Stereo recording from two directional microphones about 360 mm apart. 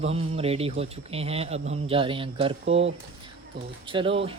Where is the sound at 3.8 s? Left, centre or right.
Centre.